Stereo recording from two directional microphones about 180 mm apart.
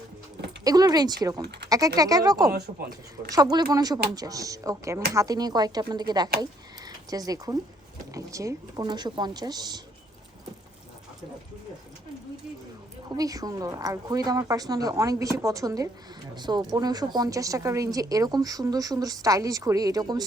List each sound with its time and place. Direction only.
0.6 s speech: 20° right (ahead or behind)
2.7 s speech: 35° right (ahead or behind)
3.2 s speech: 20° right (ahead or behind)
13.1 s speech: 20° right (ahead or behind)